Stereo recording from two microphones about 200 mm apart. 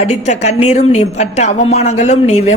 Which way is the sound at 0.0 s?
35° left (ahead or behind).